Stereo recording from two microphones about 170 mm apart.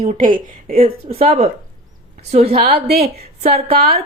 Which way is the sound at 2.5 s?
35° right (ahead or behind).